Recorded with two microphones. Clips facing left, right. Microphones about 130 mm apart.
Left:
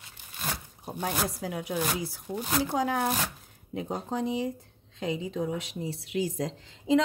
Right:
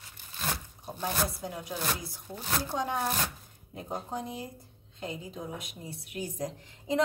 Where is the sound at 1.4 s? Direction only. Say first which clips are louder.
Left 5 dB; 80° left.